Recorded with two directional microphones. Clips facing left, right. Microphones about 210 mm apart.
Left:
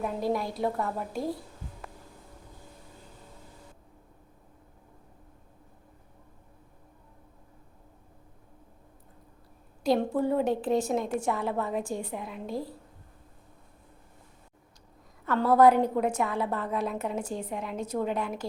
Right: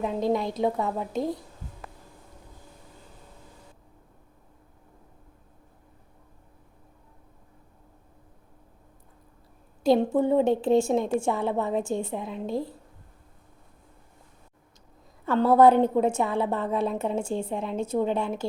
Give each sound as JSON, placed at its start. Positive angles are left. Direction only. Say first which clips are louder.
{"t": 0.0, "sound": "a woman's voice", "louder": "right 4 dB", "side_deg": -20}
{"t": 9.8, "sound": "a woman's voice", "louder": "right 4 dB", "side_deg": -25}
{"t": 15.3, "sound": "a woman's voice", "louder": "right 3 dB", "side_deg": -25}